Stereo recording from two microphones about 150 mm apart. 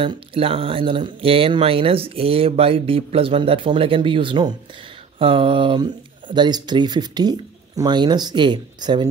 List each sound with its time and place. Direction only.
0.0 s speech: 40° right (ahead or behind)